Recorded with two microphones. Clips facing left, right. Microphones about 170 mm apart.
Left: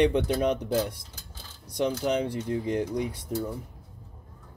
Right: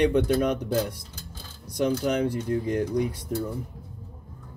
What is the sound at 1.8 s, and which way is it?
Speech, 25° left (ahead or behind).